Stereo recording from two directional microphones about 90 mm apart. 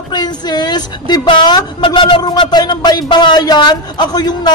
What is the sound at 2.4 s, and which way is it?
Speech, 55° left (ahead or behind).